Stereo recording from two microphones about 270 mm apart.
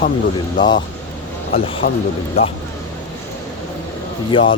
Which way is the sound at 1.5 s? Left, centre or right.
Left.